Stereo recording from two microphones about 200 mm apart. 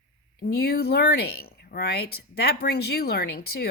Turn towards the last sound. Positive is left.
turn(degrees=50)  # may be behind; listen again after turning